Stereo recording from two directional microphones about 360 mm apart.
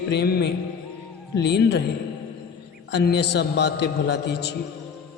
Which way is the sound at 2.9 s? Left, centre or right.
Left.